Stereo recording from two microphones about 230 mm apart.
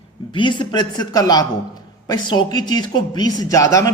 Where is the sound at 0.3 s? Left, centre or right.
Left.